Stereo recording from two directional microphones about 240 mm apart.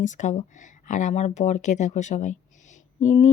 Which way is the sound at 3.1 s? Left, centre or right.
Left.